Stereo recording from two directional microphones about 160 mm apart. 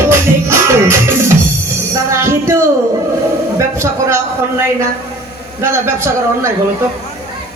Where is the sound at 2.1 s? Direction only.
15° right (ahead or behind).